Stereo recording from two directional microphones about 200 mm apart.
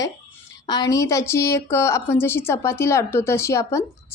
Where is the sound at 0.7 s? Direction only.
20° left (ahead or behind).